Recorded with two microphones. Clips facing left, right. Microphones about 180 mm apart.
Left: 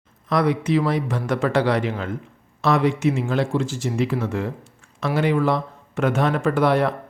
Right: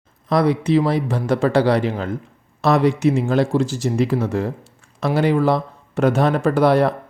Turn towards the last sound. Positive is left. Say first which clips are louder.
# right 3 dB
turn(degrees=-35)  # may be behind; listen again after turning